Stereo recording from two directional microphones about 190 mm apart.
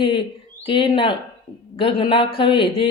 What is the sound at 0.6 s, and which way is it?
Speech, 25° left (ahead or behind).